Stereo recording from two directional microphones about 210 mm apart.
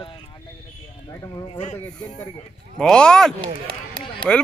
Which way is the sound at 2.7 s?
5° left (ahead or behind).